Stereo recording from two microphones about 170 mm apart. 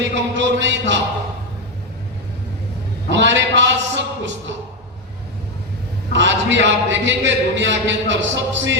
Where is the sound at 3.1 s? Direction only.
90° right.